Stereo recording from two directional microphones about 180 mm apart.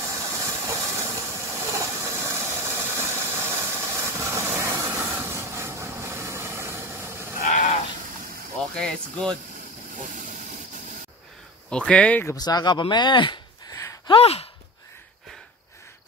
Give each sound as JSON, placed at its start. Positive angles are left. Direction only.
{"t": 0.1, "sound": "steam", "side_deg": -15}
{"t": 1.5, "sound": "engine", "side_deg": -15}
{"t": 7.4, "sound": "a sound", "side_deg": 40}
{"t": 8.7, "sound": "speech", "side_deg": 5}
{"t": 9.9, "sound": "vehicle", "side_deg": -45}
{"t": 11.7, "sound": "speech", "side_deg": 5}
{"t": 12.4, "sound": "speech", "side_deg": 25}
{"t": 14.1, "sound": "speech", "side_deg": 35}